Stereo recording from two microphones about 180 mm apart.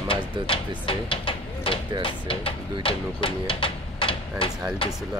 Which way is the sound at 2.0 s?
30° left (ahead or behind).